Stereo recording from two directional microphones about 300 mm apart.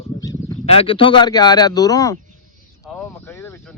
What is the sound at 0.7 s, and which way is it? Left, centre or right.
Speech, centre.